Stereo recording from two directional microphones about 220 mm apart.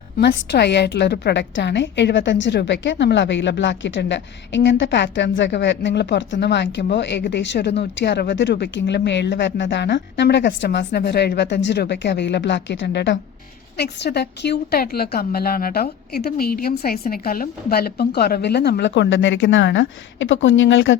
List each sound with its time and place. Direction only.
0.2 s a woman's voice: 50° left (ahead or behind)